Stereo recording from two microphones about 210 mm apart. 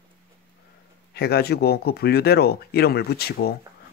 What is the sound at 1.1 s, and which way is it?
Speech, 50° left (ahead or behind).